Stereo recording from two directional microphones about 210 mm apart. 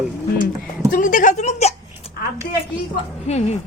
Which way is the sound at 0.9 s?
40° left (ahead or behind).